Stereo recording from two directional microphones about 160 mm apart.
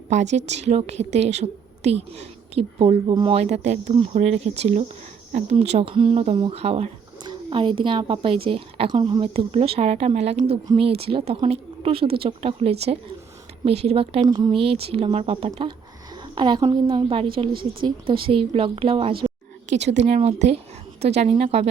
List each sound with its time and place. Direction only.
0.1 s a woman's voice: 45° right (ahead or behind)
14.3 s a woman's voice: 25° right (ahead or behind)
19.9 s a woman's voice: 55° right (ahead or behind)
20.2 s a woman's voice: 40° right (ahead or behind)